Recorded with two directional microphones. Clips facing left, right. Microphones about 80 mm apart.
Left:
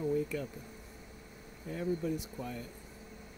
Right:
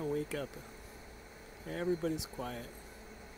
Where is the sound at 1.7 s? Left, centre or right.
Right.